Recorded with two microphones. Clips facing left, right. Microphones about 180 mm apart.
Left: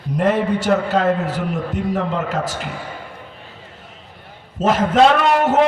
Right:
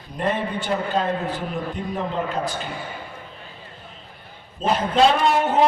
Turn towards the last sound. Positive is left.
turn(degrees=80)